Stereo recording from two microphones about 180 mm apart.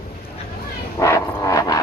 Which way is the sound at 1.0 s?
15° left (ahead or behind).